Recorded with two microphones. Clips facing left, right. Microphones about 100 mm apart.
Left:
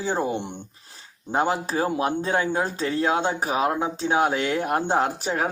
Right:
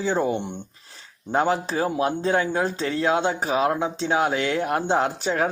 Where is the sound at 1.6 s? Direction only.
35° left (ahead or behind).